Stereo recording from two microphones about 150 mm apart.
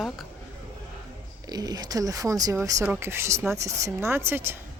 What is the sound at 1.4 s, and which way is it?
A woman's voice, 25° right (ahead or behind).